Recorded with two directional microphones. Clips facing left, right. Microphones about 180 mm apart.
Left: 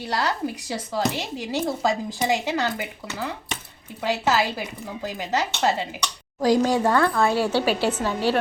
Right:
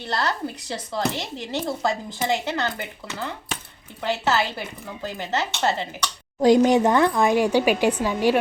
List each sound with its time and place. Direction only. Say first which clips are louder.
0.0 s speech: left 1 dB; 10° left (ahead or behind)
6.4 s speech: right 4 dB; 20° right (ahead or behind)